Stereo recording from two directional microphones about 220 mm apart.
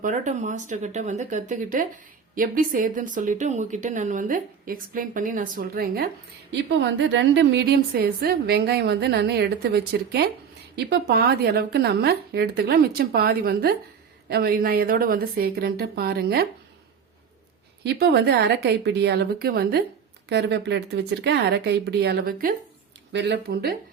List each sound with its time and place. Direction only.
0.0 s a woman's voice: 35° right (ahead or behind)
17.8 s a woman's voice: 50° right (ahead or behind)
23.1 s a woman's voice: 50° right (ahead or behind)